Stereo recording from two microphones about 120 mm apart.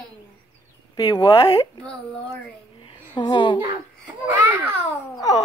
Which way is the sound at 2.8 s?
40° left (ahead or behind).